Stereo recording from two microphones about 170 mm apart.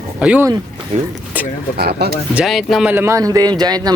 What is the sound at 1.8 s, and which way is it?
Speech, 70° right (ahead or behind).